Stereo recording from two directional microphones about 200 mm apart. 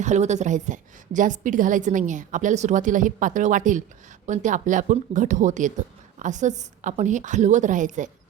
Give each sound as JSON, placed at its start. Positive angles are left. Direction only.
{"t": 0.0, "sound": "a woman's voice", "side_deg": -35}